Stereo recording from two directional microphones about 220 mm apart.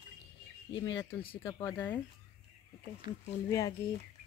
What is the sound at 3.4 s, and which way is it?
Speech, 15° left (ahead or behind).